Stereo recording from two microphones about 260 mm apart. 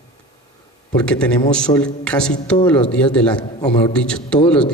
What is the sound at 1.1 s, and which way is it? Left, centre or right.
A man's voice, centre.